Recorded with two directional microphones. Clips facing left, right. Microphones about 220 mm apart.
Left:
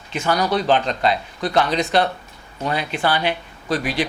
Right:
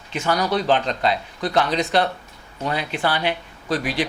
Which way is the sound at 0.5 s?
15° left (ahead or behind).